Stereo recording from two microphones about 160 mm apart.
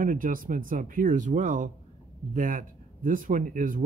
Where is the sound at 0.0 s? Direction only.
60° right (ahead or behind).